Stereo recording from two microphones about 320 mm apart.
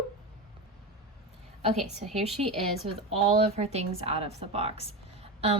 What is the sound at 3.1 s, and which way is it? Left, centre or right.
A woman's voice, right.